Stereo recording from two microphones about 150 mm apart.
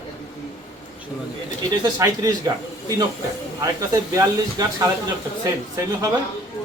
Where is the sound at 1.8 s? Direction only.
25° right (ahead or behind).